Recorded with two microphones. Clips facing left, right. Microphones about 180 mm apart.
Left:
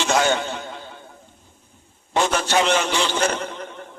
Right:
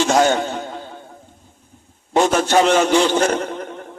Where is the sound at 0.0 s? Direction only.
45° right (ahead or behind).